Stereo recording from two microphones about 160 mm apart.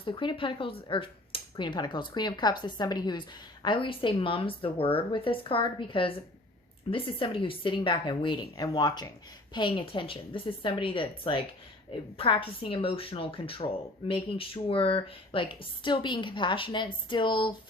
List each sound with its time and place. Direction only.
0.0 s speech: 30° left (ahead or behind)